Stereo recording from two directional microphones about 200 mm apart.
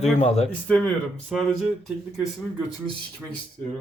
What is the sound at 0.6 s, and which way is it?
Speech, 5° left (ahead or behind).